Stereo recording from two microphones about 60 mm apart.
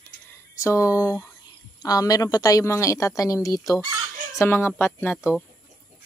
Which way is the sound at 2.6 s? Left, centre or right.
Left.